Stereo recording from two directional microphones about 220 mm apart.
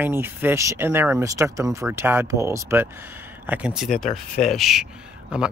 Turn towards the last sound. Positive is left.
turn(degrees=-5)  # may be behind; listen again after turning